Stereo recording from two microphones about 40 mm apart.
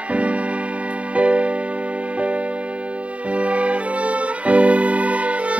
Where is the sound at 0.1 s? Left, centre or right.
Right.